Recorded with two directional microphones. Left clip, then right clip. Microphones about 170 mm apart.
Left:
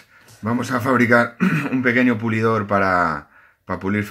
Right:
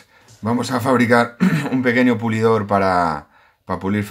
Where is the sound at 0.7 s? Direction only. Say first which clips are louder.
Even; 25° right (ahead or behind).